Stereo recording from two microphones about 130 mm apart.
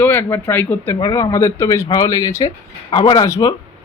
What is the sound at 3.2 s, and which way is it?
Speech, 25° left (ahead or behind).